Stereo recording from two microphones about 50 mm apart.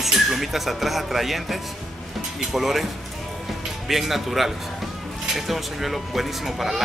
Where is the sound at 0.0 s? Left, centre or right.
Centre.